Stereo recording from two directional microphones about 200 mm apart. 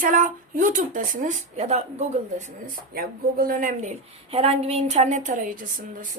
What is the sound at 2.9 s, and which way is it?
Speech, 45° right (ahead or behind).